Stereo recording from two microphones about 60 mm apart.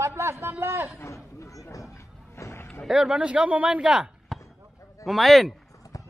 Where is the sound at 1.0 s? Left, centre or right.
Left.